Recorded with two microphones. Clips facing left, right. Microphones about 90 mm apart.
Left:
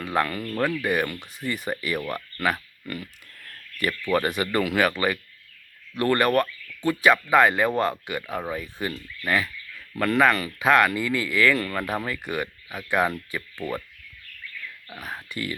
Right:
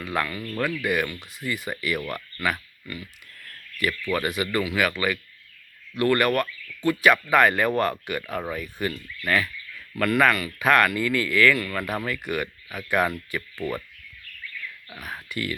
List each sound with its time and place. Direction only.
0.0 s speech: 30° left (ahead or behind)
1.1 s speech: 50° left (ahead or behind)
1.7 s speech: 30° left (ahead or behind)
2.8 s speech: 50° left (ahead or behind)
3.4 s a sound: 40° left (ahead or behind)
4.1 s speech: 40° left (ahead or behind)
4.9 s speech: 35° left (ahead or behind)
11.5 s speech: 35° left (ahead or behind)
11.8 s speech: 20° left (ahead or behind)
13.6 s speech: 5° left (ahead or behind)
15.0 s speech: 25° left (ahead or behind)